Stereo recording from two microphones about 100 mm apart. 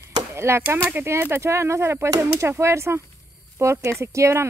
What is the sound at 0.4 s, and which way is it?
Speech, 25° right (ahead or behind).